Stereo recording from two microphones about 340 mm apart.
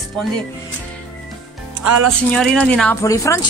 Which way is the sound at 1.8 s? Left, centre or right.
Right.